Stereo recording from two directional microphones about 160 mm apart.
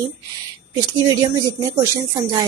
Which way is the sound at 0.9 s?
20° right (ahead or behind).